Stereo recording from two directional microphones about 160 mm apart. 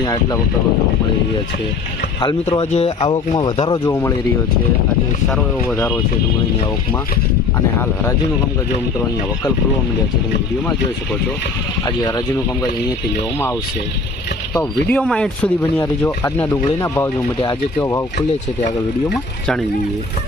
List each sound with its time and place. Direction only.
0.0 s speech: 20° left (ahead or behind)
2.2 s speech: 40° left (ahead or behind); by 4.1 s 20° left (ahead or behind)
5.3 s speech: 5° left (ahead or behind)
11.9 s speech: 20° left (ahead or behind)
14.8 s speech: 5° left (ahead or behind); by 18.0 s 20° left (ahead or behind)
19.0 s speech: centre (ahead or behind)